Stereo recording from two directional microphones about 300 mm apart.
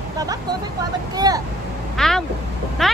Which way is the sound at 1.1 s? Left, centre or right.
Centre.